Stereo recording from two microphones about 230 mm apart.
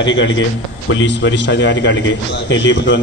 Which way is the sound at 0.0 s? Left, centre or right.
Left.